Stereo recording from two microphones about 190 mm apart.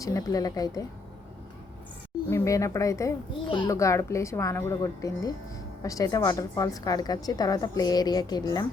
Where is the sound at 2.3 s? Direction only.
15° left (ahead or behind).